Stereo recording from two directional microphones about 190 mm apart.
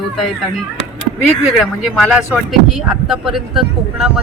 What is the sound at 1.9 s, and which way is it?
Speech, centre (ahead or behind).